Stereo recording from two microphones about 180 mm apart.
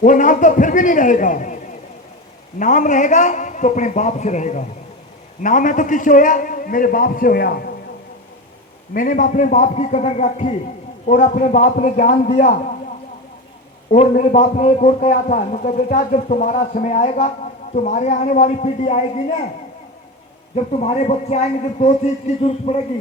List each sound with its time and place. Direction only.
0.0 s a man's voice: 45° left (ahead or behind)
2.6 s a man's voice: 45° left (ahead or behind)
8.9 s a man's voice: 50° left (ahead or behind)
13.9 s a man's voice: 45° left (ahead or behind)
20.7 s speech: 35° left (ahead or behind)